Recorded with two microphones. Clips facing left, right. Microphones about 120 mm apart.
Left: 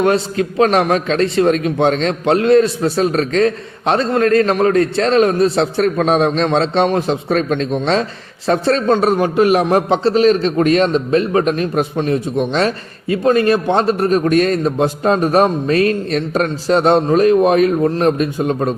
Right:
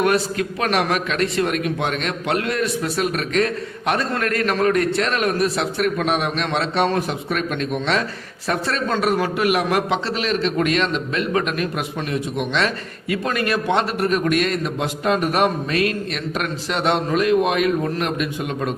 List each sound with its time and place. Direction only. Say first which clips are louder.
0.0 s a man's voice: left 4 dB; 25° left (ahead or behind)